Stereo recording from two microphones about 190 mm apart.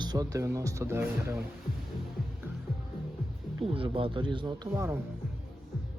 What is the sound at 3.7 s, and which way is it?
Speech, 30° right (ahead or behind).